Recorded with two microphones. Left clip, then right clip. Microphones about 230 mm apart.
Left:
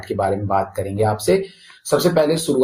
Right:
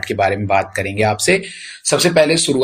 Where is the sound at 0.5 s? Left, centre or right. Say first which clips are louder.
Right 4 dB; right.